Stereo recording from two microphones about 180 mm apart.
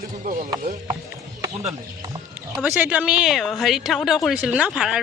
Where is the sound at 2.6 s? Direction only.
10° right (ahead or behind).